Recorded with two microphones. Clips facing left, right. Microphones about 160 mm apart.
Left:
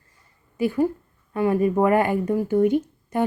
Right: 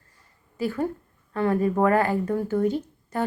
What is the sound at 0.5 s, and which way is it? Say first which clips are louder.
A woman's voice: left 5 dB; 15° left (ahead or behind).